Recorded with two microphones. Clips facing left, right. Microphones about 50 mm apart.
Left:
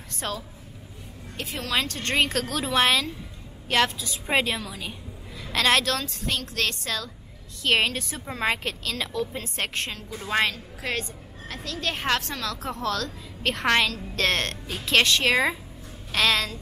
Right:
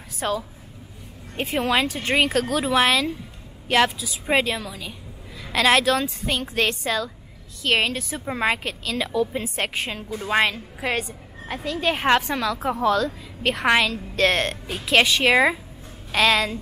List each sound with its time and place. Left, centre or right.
0.1 s a woman's voice: centre
1.3 s a woman's voice: right
7.6 s a woman's voice: centre